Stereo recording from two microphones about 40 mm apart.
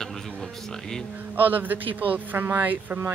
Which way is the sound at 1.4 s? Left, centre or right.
Right.